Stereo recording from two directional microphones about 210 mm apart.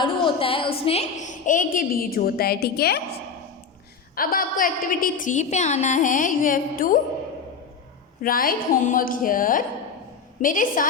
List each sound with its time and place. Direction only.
0.0 s a woman's voice: 25° left (ahead or behind); by 3.0 s 50° left (ahead or behind)
4.1 s a woman's voice: 45° left (ahead or behind)
8.2 s a woman's voice: 45° left (ahead or behind)